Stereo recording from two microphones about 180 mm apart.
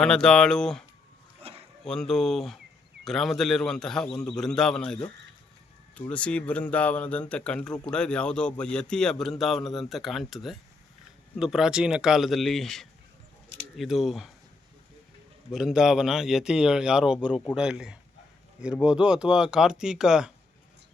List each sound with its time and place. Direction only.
0.0 s speech: 5° left (ahead or behind)
1.4 s a sound: 35° right (ahead or behind)
1.8 s speech: 5° left (ahead or behind)
15.5 s speech: 5° right (ahead or behind)